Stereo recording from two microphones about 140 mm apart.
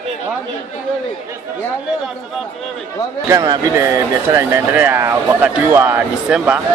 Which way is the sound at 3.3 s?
25° right (ahead or behind).